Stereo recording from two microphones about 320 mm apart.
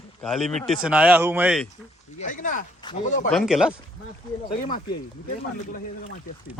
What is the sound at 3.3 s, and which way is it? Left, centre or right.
Speech, centre.